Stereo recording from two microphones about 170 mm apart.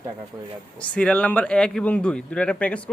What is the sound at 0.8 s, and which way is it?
A man's voice, 5° left (ahead or behind).